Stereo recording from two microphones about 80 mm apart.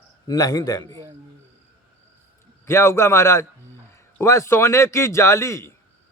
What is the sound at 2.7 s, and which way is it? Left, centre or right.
Speech, left.